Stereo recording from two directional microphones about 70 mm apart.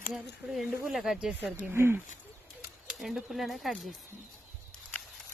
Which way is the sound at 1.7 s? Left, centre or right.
Right.